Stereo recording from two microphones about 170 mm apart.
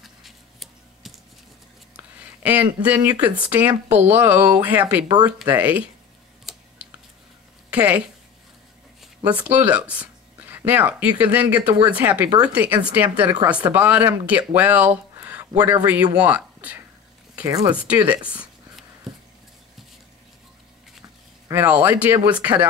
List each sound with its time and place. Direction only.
0.0 s a sound: centre (ahead or behind)
3.2 s speech: 10° right (ahead or behind)
6.5 s a sound: centre (ahead or behind)
7.7 s speech: 10° right (ahead or behind)
9.0 s a sound: 10° right (ahead or behind)
9.7 s speech: 5° right (ahead or behind)
15.5 s speech: 20° right (ahead or behind)
16.2 s speech: 10° right (ahead or behind)
17.5 s speech: 20° right (ahead or behind)
17.7 s speech: 10° right (ahead or behind)
21.5 s speech: 10° right (ahead or behind)